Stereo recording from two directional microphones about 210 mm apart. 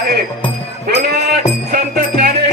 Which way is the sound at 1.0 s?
50° right (ahead or behind).